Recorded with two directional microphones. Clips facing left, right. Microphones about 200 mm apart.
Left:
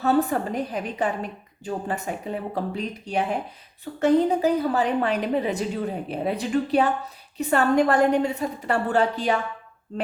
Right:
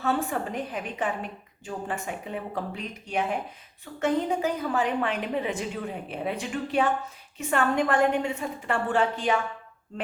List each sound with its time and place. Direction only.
0.3 s a woman's voice: 40° left (ahead or behind)